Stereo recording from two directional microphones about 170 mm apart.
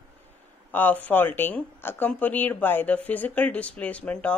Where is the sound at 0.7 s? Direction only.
10° left (ahead or behind).